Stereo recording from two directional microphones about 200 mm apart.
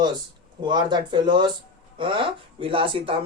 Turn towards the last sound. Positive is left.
turn(degrees=-25)  # may be behind; listen again after turning